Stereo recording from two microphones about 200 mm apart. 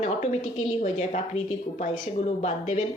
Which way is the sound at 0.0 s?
40° left (ahead or behind).